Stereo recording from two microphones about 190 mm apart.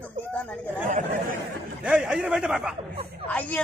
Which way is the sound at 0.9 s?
40° right (ahead or behind).